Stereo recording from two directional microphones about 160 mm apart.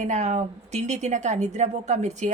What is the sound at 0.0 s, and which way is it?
Speech, 45° right (ahead or behind).